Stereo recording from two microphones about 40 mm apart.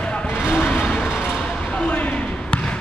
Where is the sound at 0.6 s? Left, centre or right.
Left.